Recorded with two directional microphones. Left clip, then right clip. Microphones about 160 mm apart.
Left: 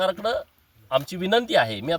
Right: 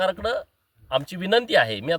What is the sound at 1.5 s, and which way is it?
Speech, 25° right (ahead or behind).